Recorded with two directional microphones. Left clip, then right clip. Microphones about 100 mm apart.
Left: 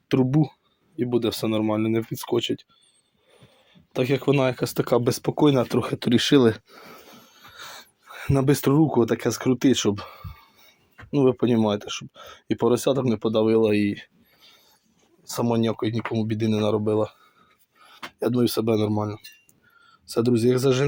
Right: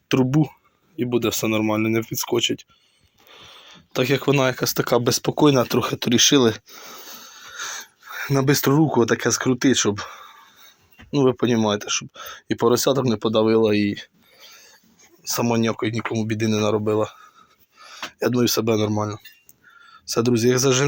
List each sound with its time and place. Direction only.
0.1 s speech: 10° left (ahead or behind)
3.2 s a sound: 5° left (ahead or behind)
4.0 s speech: 15° left (ahead or behind)
5.3 s speech: 5° left (ahead or behind)
5.6 s speech: 20° left (ahead or behind)
6.1 s a sound: 45° left (ahead or behind); by 8.1 s 15° left (ahead or behind)
8.1 s speech: 30° left (ahead or behind)
8.8 s speech: 10° left (ahead or behind); by 10.8 s 35° left (ahead or behind)
11.1 s speech: 20° left (ahead or behind)
12.6 s speech: 10° left (ahead or behind)
17.7 s speech: centre (ahead or behind)
19.8 s speech: centre (ahead or behind)